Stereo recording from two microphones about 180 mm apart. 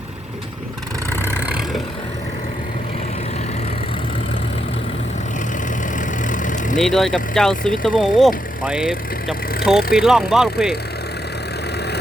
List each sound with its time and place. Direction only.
1.2 s vehicle: 10° right (ahead or behind)
6.0 s vehicle: 45° left (ahead or behind)
6.7 s speech: centre (ahead or behind)